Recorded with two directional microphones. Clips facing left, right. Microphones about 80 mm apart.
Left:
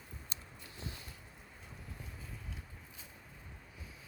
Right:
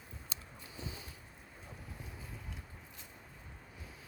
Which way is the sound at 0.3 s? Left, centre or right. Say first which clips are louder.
Right 3 dB; right.